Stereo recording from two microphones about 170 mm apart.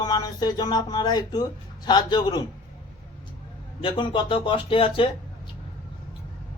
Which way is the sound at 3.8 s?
30° left (ahead or behind).